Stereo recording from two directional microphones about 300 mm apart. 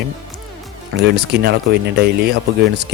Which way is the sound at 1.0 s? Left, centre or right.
Right.